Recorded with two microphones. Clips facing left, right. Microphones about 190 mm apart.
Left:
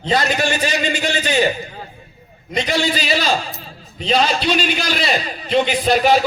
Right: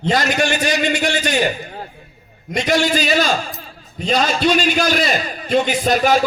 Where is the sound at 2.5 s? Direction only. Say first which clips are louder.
Right 3 dB; 45° right (ahead or behind).